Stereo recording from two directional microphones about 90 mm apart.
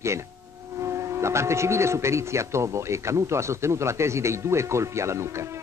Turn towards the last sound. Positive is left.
turn(degrees=-30)  # may be behind; listen again after turning